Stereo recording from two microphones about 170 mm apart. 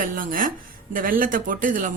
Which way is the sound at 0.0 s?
55° right (ahead or behind).